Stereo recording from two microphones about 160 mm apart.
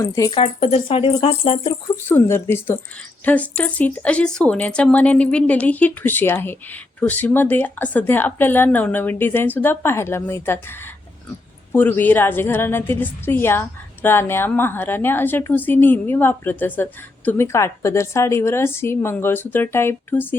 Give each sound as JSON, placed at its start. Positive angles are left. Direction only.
{"t": 0.0, "sound": "speech", "side_deg": 20}
{"t": 0.3, "sound": "speech", "side_deg": 35}
{"t": 2.0, "sound": "a woman's voice", "side_deg": 15}